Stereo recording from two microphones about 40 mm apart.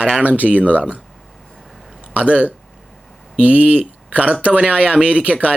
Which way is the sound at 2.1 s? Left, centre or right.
Right.